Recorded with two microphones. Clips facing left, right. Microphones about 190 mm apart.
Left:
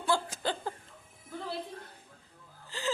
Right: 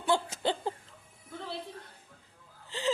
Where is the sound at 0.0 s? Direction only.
20° right (ahead or behind).